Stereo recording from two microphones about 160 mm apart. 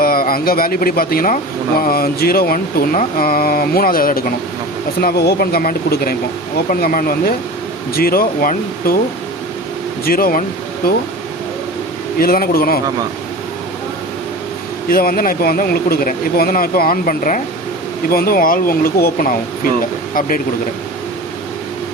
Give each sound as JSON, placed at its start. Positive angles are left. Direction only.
{"t": 0.0, "sound": "speech", "side_deg": 65}
{"t": 4.9, "sound": "speech", "side_deg": 75}
{"t": 10.1, "sound": "speech", "side_deg": 65}
{"t": 12.2, "sound": "speech", "side_deg": 65}
{"t": 14.8, "sound": "speech", "side_deg": 65}